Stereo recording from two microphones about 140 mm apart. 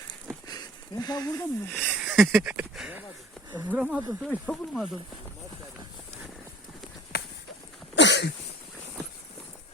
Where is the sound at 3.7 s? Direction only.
5° right (ahead or behind).